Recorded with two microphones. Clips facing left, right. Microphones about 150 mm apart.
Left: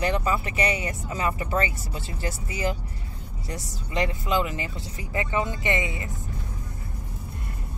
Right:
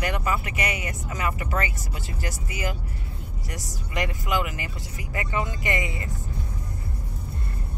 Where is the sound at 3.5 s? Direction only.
30° left (ahead or behind).